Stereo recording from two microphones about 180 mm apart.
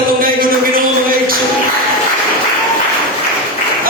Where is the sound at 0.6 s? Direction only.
55° right (ahead or behind).